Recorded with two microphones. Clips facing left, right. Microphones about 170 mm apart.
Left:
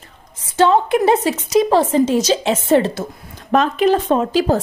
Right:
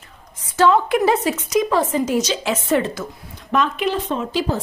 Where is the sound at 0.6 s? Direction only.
25° left (ahead or behind).